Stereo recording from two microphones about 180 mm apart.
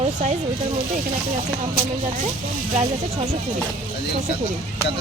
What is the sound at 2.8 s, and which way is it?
Speech, 35° right (ahead or behind).